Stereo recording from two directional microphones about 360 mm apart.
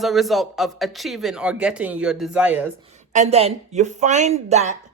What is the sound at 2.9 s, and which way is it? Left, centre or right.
Speech, centre.